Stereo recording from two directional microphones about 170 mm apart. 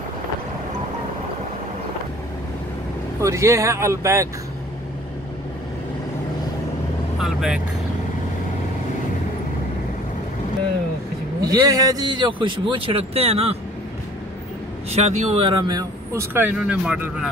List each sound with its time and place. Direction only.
3.2 s speech: 15° right (ahead or behind)
7.2 s speech: centre (ahead or behind)
11.4 s speech: 20° right (ahead or behind); by 13.6 s 35° right (ahead or behind)
14.9 s speech: 40° right (ahead or behind)
15.4 s speech: 25° right (ahead or behind); by 17.3 s 5° right (ahead or behind)